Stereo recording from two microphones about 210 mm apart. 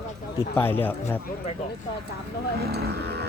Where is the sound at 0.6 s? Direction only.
10° left (ahead or behind).